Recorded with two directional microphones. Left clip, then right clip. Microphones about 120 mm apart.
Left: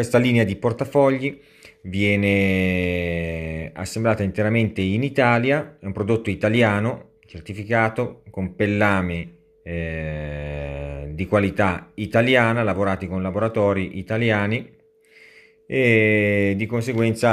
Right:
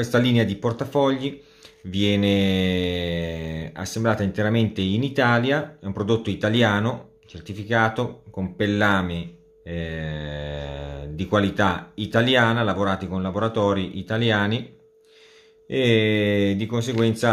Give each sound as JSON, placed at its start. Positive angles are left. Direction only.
{"t": 0.1, "sound": "speech", "side_deg": 30}
{"t": 2.0, "sound": "speech", "side_deg": 20}
{"t": 8.6, "sound": "speech", "side_deg": 30}
{"t": 15.7, "sound": "mantra", "side_deg": 15}
{"t": 16.6, "sound": "speech", "side_deg": 25}